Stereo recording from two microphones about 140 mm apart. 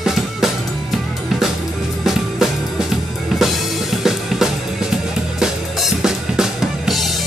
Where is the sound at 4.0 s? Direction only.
5° right (ahead or behind).